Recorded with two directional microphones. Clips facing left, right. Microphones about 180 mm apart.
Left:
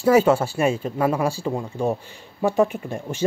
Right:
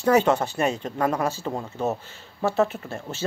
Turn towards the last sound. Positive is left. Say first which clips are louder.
# left 6 dB
turn(degrees=15)  # may be behind; listen again after turning